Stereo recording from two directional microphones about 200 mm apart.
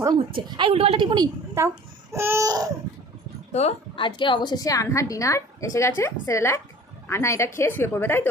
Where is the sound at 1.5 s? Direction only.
10° right (ahead or behind).